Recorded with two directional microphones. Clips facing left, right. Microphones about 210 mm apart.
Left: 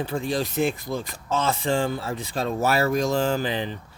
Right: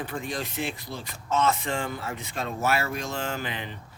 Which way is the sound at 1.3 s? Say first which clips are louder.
Left 2 dB; 30° left (ahead or behind).